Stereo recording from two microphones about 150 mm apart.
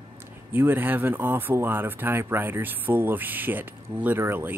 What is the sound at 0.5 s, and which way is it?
Speech, 15° right (ahead or behind).